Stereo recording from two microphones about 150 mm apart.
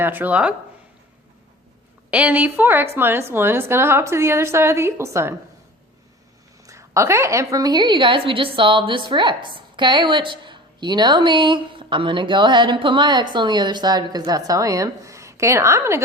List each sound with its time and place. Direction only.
0.0 s a woman's voice: 10° right (ahead or behind)
2.0 s a woman's voice: 10° right (ahead or behind)
6.7 s a woman's voice: 20° right (ahead or behind)